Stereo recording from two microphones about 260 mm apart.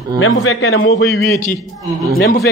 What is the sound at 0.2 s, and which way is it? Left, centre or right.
A man's voice, left.